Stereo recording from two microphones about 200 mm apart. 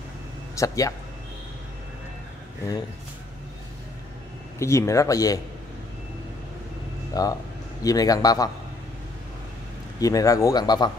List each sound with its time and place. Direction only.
0.6 s speech: 15° left (ahead or behind)
4.6 s speech: 15° left (ahead or behind)
7.2 s a man's voice: 20° left (ahead or behind)
9.9 s speech: 15° left (ahead or behind)